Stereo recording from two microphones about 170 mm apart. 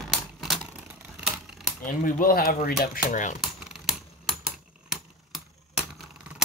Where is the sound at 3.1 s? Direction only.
45° left (ahead or behind).